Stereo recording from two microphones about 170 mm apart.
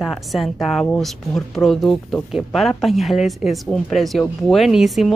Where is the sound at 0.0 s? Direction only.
Centre (ahead or behind).